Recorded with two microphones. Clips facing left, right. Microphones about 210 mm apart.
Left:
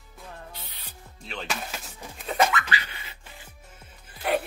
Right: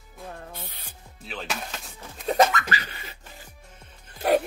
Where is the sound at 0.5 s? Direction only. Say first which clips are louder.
Right 4 dB; 50° right (ahead or behind).